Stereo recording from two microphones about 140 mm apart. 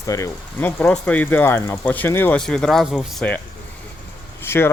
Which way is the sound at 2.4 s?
5° left (ahead or behind).